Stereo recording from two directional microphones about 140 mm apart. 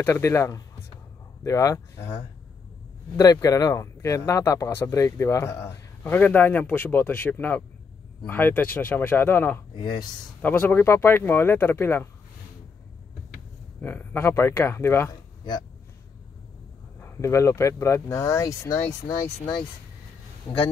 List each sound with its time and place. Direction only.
0.0 s speech: 20° left (ahead or behind)
3.2 s speech: 25° left (ahead or behind)
9.8 s speech: 30° left (ahead or behind)
10.4 s speech: 10° left (ahead or behind)
13.7 s speech: 15° left (ahead or behind)
17.0 s speech: 20° left (ahead or behind)